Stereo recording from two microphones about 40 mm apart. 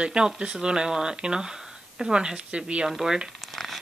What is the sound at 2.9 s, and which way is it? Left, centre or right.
Speech, centre.